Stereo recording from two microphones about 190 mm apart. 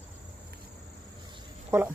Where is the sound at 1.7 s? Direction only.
10° right (ahead or behind).